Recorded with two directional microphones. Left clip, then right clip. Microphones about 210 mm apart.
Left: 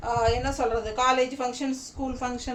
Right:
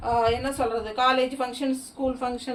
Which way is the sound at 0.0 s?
10° left (ahead or behind).